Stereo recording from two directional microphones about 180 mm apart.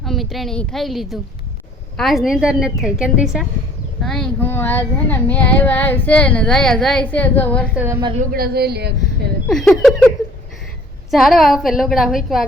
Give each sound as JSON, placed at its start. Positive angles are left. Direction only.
{"t": 0.0, "sound": "a woman's voice", "side_deg": 0}
{"t": 8.0, "sound": "a woman's voice", "side_deg": -35}
{"t": 8.3, "sound": "a woman's voice", "side_deg": -60}
{"t": 9.5, "sound": "a woman's voice", "side_deg": 0}
{"t": 11.1, "sound": "a woman's voice", "side_deg": 0}